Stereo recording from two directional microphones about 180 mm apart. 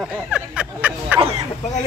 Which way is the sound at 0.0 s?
5° right (ahead or behind).